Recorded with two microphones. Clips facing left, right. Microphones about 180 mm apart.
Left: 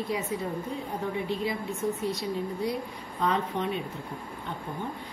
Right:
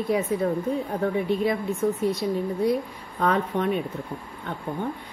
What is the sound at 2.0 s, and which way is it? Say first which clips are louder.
Speech: right 6 dB; 55° right (ahead or behind).